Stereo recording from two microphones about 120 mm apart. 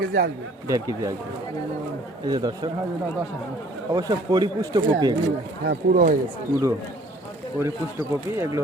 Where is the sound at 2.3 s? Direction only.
35° right (ahead or behind).